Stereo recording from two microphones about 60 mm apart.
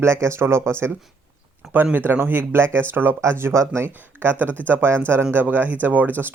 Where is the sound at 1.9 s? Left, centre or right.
Right.